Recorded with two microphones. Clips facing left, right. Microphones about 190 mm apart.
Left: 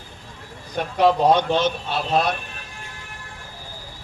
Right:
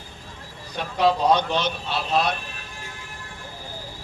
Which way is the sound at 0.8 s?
50° left (ahead or behind).